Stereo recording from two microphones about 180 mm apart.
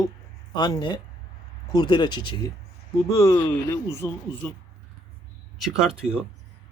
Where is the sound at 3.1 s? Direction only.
15° left (ahead or behind).